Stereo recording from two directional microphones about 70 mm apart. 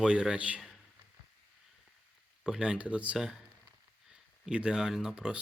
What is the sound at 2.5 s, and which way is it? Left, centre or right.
Speech, centre.